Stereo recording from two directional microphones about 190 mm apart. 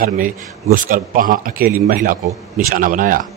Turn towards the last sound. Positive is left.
turn(degrees=-45)  # may be behind; listen again after turning